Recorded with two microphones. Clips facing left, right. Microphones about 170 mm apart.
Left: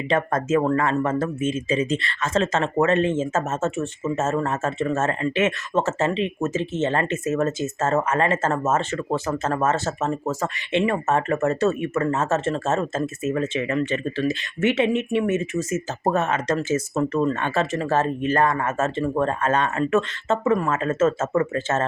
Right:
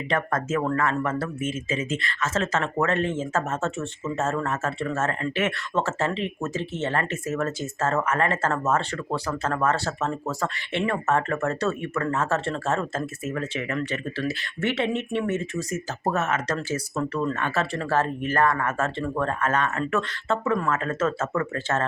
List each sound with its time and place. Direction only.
0.1 s speech: 25° left (ahead or behind)